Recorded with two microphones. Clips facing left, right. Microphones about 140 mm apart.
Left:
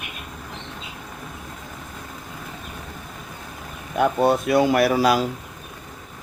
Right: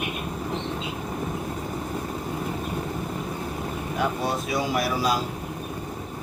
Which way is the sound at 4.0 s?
55° left (ahead or behind).